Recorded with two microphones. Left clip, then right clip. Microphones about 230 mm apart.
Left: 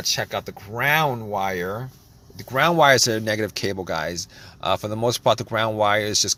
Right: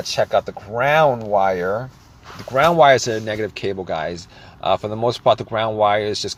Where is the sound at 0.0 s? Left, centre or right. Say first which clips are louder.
Right 6 dB; left.